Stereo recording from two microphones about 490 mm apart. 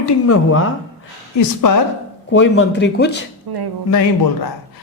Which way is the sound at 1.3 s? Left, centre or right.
Left.